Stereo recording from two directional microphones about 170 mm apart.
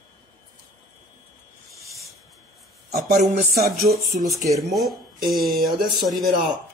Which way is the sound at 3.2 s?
50° right (ahead or behind).